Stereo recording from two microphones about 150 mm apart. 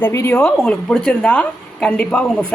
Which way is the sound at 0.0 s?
15° left (ahead or behind).